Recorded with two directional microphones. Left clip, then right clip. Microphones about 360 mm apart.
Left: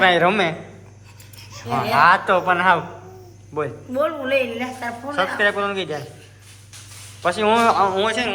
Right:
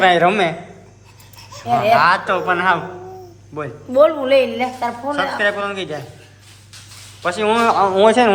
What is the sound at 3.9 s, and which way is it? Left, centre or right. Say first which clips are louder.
Speech: right 8 dB; right.